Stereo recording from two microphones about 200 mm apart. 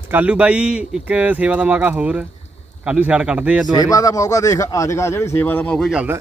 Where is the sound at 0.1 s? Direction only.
5° right (ahead or behind).